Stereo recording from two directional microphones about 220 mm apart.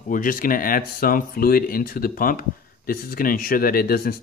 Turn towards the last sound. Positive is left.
turn(degrees=45)  # may be behind; listen again after turning